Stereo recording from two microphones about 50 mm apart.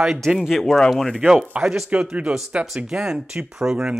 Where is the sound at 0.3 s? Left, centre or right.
Centre.